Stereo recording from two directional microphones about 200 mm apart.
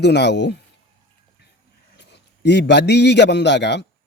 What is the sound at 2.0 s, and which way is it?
A man's voice, 60° left (ahead or behind).